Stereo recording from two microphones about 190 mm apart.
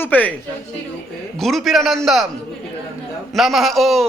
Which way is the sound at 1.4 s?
Centre (ahead or behind).